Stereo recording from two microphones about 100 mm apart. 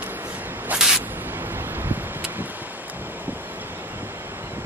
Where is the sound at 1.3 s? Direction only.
20° right (ahead or behind).